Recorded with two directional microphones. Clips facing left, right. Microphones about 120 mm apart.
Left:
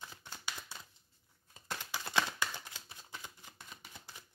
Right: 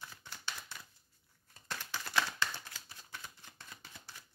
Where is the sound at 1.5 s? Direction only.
15° left (ahead or behind).